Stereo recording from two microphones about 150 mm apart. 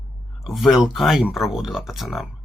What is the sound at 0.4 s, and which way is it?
Speech, centre (ahead or behind).